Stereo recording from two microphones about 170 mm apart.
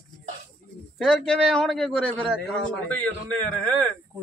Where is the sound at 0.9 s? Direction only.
Centre (ahead or behind).